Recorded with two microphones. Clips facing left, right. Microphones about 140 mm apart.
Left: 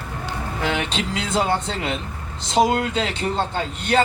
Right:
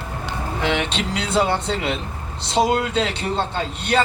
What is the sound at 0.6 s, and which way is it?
A man's voice, 45° left (ahead or behind).